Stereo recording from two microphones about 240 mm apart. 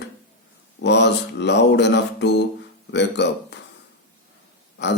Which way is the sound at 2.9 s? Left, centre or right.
Left.